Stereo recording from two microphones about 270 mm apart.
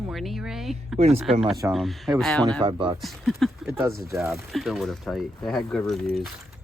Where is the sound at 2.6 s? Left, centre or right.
Centre.